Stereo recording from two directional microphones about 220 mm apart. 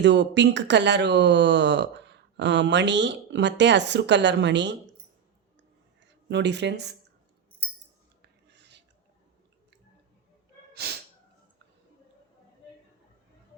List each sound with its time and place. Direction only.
0.0 s speech: 50° right (ahead or behind)
6.2 s speech: 50° right (ahead or behind)
8.2 s writing: 50° right (ahead or behind)
10.8 s music: 45° right (ahead or behind)